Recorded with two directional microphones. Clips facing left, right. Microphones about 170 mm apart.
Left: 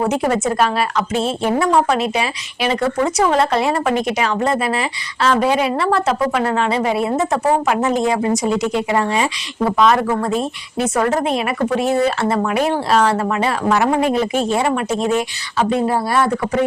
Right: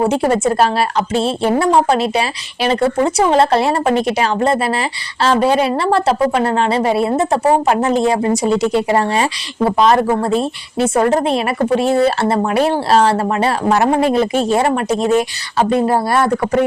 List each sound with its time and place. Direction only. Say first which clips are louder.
0.0 s a woman's voice: right 3 dB; 30° right (ahead or behind)